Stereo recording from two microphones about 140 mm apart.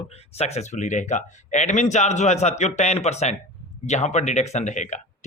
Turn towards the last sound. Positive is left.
turn(degrees=60)  # may be behind; listen again after turning